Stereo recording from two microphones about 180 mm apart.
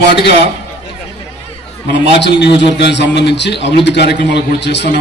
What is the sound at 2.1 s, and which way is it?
A man's voice, 70° left (ahead or behind).